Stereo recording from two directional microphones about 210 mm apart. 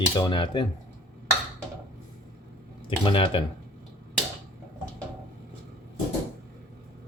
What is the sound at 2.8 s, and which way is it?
Speech, 25° left (ahead or behind).